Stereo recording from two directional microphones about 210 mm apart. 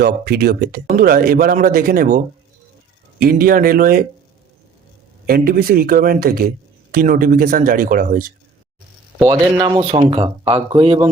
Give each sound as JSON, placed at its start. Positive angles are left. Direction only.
{"t": 0.0, "sound": "speech", "side_deg": -50}
{"t": 5.2, "sound": "speech", "side_deg": -45}
{"t": 9.1, "sound": "speech", "side_deg": -15}